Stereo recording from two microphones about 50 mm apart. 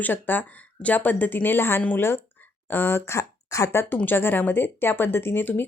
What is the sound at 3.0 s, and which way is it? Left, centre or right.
Speech, left.